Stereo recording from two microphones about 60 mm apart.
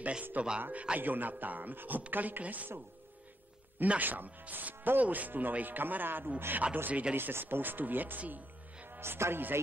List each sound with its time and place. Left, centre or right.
0.0 s a man's voice: right
3.8 s speech: right
6.9 s a man's voice: right
7.2 s speech: right